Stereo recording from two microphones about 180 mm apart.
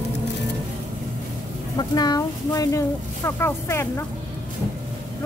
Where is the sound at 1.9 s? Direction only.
20° left (ahead or behind).